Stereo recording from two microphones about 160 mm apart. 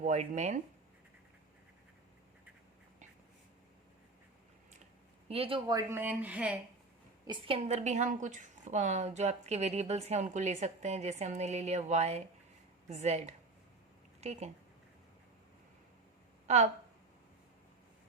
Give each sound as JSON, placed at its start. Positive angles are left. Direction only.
{"t": 0.0, "sound": "speech", "side_deg": -45}
{"t": 5.3, "sound": "a woman's voice", "side_deg": -35}
{"t": 7.3, "sound": "a woman's voice", "side_deg": -30}